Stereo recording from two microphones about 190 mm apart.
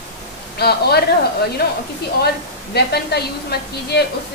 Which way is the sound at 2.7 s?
60° left (ahead or behind).